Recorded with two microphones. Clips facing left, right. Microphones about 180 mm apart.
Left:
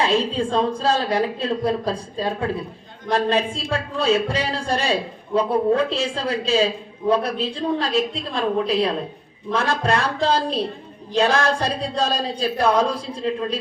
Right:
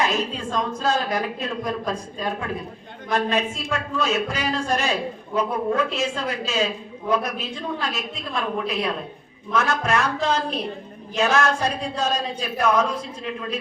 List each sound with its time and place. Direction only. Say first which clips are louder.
0.0 s a woman's voice: left 4 dB; 30° left (ahead or behind)